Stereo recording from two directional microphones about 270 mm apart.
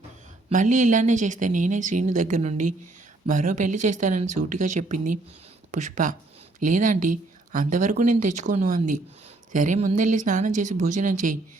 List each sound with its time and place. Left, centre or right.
0.5 s speech: right